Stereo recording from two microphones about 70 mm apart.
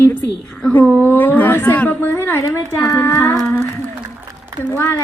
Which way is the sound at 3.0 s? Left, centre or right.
Left.